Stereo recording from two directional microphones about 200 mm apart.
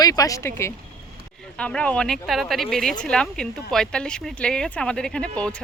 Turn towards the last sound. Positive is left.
turn(degrees=5)  # may be behind; listen again after turning